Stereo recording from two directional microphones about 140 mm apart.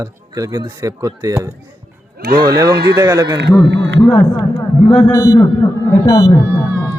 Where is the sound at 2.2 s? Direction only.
90° right.